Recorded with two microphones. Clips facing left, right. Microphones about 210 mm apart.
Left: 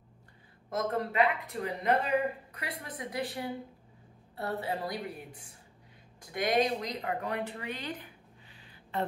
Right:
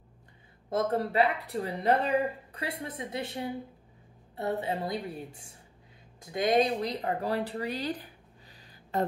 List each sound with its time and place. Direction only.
0.7 s a woman's voice: 30° right (ahead or behind)